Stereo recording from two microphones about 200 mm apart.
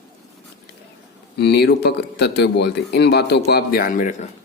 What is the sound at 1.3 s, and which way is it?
Speech, 55° left (ahead or behind).